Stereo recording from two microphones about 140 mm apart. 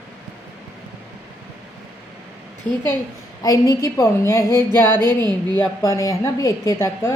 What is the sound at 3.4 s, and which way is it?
A woman's voice, 25° left (ahead or behind).